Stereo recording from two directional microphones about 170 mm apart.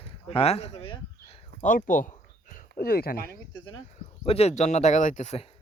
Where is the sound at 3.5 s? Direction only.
25° left (ahead or behind).